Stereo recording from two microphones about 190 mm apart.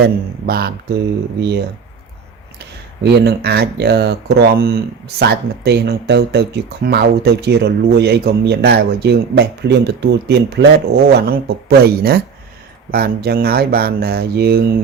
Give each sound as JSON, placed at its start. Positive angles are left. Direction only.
{"t": 0.0, "sound": "speech", "side_deg": -55}
{"t": 3.0, "sound": "speech", "side_deg": -60}